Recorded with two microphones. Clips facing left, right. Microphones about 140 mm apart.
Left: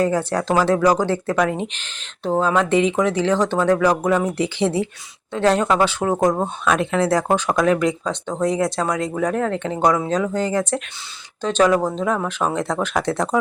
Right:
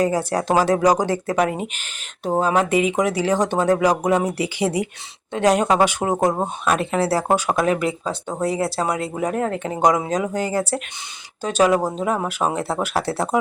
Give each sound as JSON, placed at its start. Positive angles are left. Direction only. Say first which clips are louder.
{"t": 0.0, "sound": "speech", "louder": "even", "side_deg": -10}